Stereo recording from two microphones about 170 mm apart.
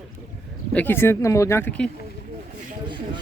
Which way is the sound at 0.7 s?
10° left (ahead or behind).